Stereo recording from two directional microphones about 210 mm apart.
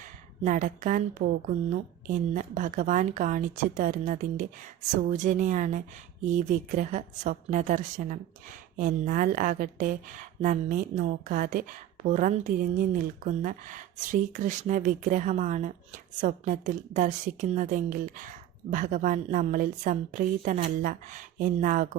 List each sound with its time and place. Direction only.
0.4 s speech: 40° right (ahead or behind)
2.0 s speech: 35° right (ahead or behind)